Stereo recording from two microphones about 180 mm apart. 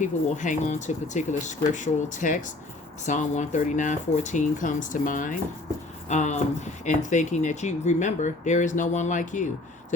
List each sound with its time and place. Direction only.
0.0 s speech: 45° left (ahead or behind)